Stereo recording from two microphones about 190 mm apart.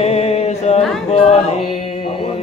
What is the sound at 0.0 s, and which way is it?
Music, 35° left (ahead or behind).